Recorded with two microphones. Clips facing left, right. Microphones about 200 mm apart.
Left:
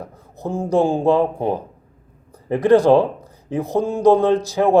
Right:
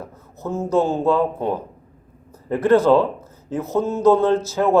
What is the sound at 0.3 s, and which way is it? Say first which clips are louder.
Speech: left 1 dB; 15° left (ahead or behind).